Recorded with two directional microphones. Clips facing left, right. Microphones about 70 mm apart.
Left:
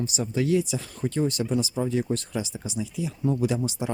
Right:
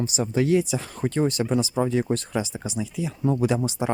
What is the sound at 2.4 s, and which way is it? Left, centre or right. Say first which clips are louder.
Speech: right 4 dB; right.